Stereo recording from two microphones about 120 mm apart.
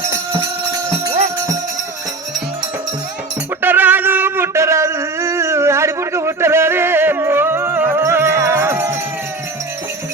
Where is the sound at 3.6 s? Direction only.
15° right (ahead or behind).